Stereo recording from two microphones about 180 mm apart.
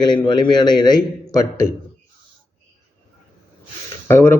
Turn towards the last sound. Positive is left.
turn(degrees=10)  # may be behind; listen again after turning